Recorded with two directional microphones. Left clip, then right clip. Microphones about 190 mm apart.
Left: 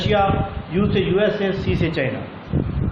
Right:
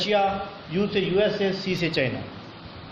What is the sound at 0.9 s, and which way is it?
A man's voice, 25° right (ahead or behind).